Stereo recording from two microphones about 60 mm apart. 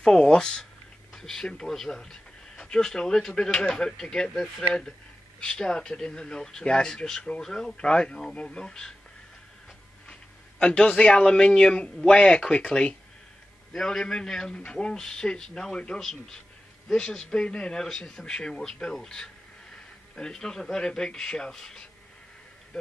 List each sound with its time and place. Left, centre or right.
0.0 s speech: centre
10.6 s speech: centre